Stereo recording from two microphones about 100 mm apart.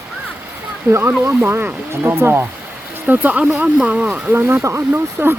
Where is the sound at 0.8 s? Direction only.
25° right (ahead or behind).